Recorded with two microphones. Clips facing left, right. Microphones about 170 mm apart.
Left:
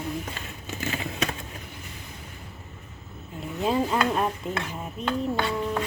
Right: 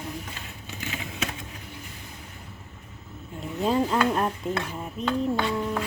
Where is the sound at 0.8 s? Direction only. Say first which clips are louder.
Left 4 dB; 45° left (ahead or behind).